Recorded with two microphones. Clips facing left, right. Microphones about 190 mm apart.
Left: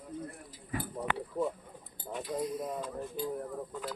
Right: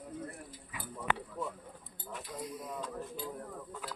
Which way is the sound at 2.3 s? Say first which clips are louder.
Left 9 dB; 35° left (ahead or behind).